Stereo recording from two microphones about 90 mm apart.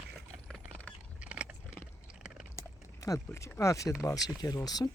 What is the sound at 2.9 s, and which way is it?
Speech, 40° left (ahead or behind).